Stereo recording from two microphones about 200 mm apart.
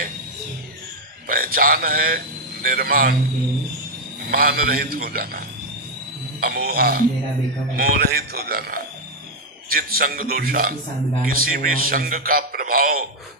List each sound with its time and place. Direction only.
1.3 s speech: 45° right (ahead or behind)
4.3 s a man's voice: 50° right (ahead or behind)